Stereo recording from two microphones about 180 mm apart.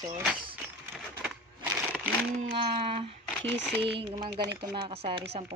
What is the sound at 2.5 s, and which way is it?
Speech, 30° right (ahead or behind).